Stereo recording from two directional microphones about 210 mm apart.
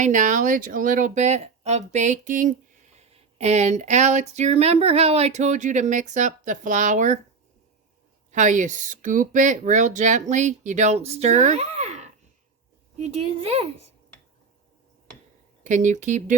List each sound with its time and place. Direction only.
0.0 s speech: 35° right (ahead or behind)
8.3 s a woman's voice: 35° right (ahead or behind)
15.6 s speech: 35° right (ahead or behind)